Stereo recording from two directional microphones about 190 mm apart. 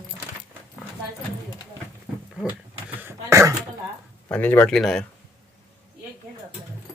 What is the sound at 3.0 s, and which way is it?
Dog, 15° right (ahead or behind).